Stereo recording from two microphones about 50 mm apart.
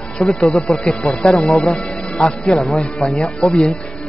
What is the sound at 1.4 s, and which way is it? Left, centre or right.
Speech, centre.